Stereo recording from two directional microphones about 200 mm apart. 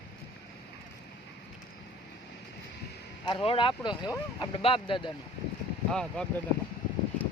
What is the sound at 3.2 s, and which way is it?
Speech, 25° left (ahead or behind).